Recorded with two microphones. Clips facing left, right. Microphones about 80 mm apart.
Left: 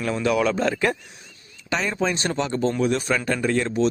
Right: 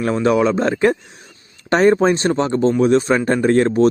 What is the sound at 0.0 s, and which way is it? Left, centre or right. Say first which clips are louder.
Speech: right 6 dB; right.